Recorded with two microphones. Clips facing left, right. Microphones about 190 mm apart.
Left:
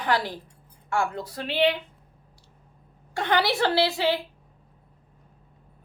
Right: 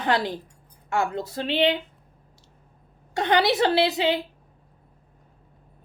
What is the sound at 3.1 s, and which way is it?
Speech, 20° right (ahead or behind).